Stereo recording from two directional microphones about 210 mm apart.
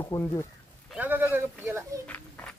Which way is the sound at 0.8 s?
10° right (ahead or behind).